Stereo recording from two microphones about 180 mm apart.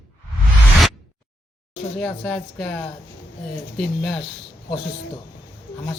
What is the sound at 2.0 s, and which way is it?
Speech, centre (ahead or behind).